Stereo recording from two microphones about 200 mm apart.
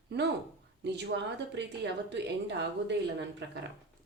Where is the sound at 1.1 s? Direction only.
60° right (ahead or behind).